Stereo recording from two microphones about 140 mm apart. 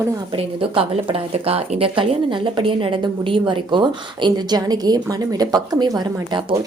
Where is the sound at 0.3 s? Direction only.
40° right (ahead or behind).